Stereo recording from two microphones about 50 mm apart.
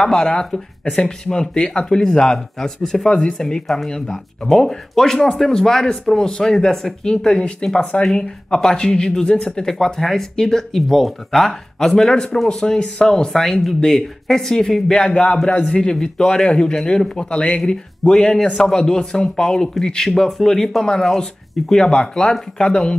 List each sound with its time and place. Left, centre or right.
0.0 s speech: centre
20.1 s speech: centre